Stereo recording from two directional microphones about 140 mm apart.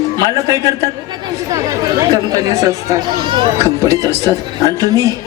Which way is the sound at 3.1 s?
35° right (ahead or behind).